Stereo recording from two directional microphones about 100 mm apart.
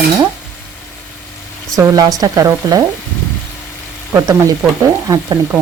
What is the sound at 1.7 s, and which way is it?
Speech, 40° right (ahead or behind).